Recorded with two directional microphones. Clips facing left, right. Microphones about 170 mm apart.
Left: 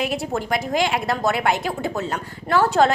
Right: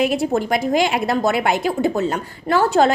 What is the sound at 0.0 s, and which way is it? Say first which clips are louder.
A woman's voice: right 6 dB; 15° right (ahead or behind).